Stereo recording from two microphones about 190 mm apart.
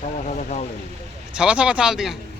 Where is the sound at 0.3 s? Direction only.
35° left (ahead or behind).